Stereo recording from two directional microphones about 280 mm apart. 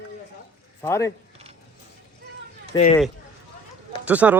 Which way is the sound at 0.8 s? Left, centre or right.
Centre.